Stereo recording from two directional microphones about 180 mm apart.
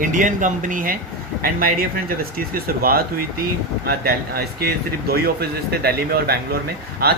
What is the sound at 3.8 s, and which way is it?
Speech, 60° right (ahead or behind).